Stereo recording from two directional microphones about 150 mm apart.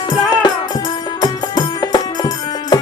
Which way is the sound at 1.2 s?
25° left (ahead or behind).